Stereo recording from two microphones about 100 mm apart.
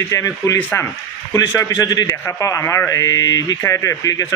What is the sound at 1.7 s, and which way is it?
Speech, 45° left (ahead or behind).